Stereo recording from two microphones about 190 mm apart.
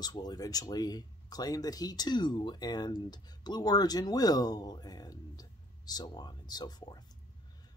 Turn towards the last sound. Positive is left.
turn(degrees=20)  # may be behind; listen again after turning